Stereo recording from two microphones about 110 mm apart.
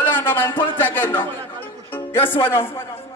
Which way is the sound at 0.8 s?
20° left (ahead or behind).